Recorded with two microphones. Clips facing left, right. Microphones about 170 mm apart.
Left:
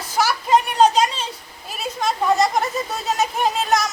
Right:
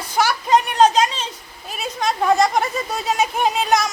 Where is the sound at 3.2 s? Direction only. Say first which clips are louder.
Right 1 dB; centre (ahead or behind).